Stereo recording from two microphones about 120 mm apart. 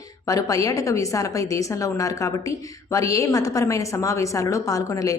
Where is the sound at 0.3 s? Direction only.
30° left (ahead or behind).